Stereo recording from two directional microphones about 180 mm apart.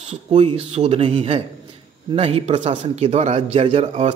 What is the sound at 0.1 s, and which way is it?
Speech, 35° right (ahead or behind).